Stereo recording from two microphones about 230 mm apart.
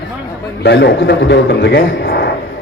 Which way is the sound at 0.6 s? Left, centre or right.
Left.